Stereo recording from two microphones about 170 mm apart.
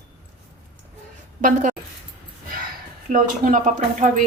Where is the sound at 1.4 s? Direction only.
50° right (ahead or behind).